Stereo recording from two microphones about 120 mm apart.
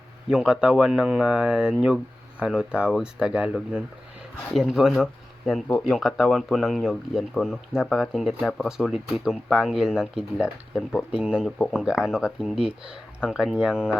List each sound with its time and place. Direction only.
0.3 s speech: 5° right (ahead or behind)